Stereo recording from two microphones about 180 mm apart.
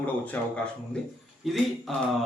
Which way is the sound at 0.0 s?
10° left (ahead or behind).